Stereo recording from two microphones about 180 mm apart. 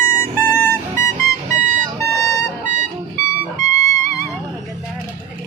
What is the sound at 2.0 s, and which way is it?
Vehicle, 15° left (ahead or behind).